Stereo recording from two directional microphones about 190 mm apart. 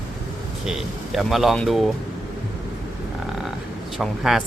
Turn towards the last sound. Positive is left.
turn(degrees=0)  # may be behind; listen again after turning